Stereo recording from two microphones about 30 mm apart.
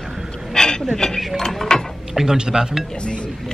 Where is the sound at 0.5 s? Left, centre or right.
Centre.